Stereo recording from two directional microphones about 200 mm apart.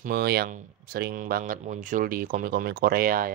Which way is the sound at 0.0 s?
50° right (ahead or behind).